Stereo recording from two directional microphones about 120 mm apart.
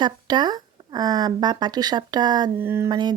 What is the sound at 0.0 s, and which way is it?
Speech, 40° right (ahead or behind).